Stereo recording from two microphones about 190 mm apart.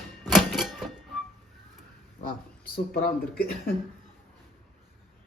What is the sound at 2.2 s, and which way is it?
Speech, 50° left (ahead or behind).